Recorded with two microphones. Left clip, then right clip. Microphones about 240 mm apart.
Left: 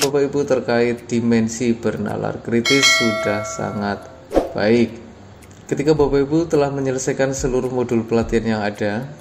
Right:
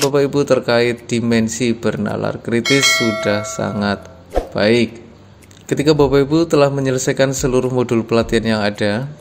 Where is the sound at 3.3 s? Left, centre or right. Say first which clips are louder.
Right 3 dB; right.